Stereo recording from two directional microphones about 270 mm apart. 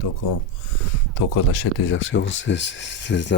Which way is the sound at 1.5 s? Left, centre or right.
Left.